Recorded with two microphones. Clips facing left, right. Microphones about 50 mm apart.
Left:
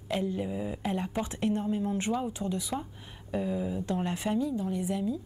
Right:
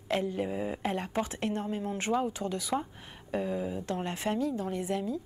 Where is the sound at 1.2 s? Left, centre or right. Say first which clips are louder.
Left 3 dB; right.